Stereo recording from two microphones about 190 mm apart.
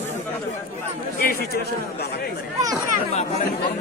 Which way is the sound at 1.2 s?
55° left (ahead or behind).